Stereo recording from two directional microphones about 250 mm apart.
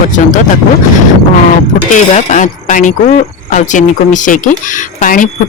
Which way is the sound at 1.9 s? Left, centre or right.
Left.